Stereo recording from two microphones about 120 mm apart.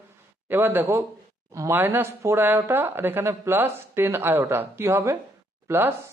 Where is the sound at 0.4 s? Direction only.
20° right (ahead or behind).